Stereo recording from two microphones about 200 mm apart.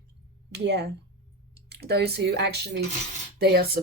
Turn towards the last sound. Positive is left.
turn(degrees=-50)  # may be behind; listen again after turning